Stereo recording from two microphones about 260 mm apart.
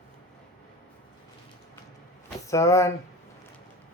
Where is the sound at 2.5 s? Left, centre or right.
Centre.